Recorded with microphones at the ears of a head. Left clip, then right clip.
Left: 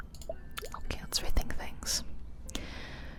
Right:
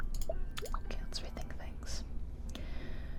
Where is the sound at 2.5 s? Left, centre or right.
Left.